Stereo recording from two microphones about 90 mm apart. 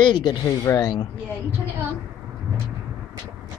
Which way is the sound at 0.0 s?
60° left (ahead or behind).